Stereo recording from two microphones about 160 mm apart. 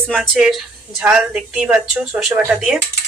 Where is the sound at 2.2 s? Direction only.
5° right (ahead or behind).